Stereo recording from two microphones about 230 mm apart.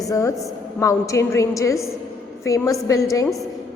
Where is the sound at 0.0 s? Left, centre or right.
Centre.